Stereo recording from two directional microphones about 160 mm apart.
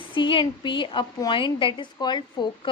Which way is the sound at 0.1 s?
30° left (ahead or behind).